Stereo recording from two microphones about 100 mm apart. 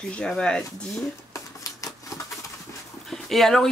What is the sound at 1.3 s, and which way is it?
Shuffling cards, 35° left (ahead or behind).